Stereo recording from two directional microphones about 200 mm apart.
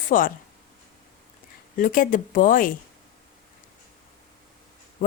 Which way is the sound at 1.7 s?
45° left (ahead or behind).